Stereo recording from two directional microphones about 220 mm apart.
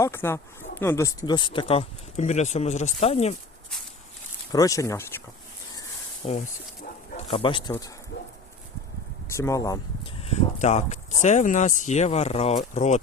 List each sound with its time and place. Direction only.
0.0 s speech: 10° left (ahead or behind); by 3.3 s 30° left (ahead or behind)
4.5 s speech: 15° left (ahead or behind)
6.2 s speech: 30° left (ahead or behind)
8.1 s dog: 55° left (ahead or behind)
9.3 s speech: 15° left (ahead or behind)
10.2 s speech: 30° left (ahead or behind)